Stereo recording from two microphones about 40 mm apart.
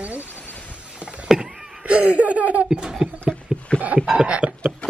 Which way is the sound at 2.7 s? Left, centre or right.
Centre.